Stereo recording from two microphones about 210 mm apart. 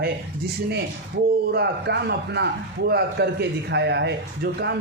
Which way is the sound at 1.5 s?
50° right (ahead or behind).